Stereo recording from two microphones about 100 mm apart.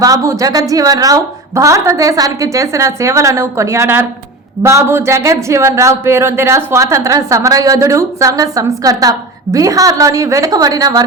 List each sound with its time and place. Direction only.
0.0 s speech: 35° right (ahead or behind)